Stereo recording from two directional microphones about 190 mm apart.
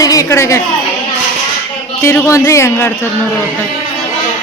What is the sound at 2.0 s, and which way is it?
A man's voice, 15° left (ahead or behind).